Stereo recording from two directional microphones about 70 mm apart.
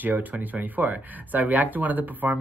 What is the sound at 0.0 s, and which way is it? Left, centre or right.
Speech, right.